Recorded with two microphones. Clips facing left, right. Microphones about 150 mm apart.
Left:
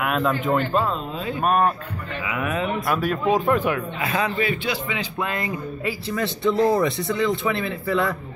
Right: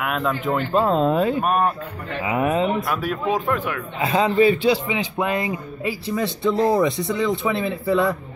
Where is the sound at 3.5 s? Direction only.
20° left (ahead or behind).